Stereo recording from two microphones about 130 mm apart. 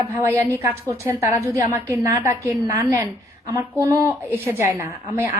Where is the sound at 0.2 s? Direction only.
20° right (ahead or behind).